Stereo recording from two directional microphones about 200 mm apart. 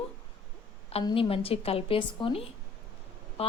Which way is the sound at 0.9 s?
30° left (ahead or behind).